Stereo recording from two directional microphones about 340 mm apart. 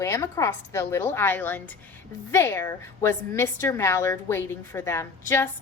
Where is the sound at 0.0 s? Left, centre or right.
Centre.